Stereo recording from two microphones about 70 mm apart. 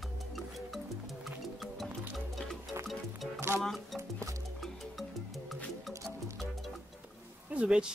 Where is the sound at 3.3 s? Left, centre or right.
Right.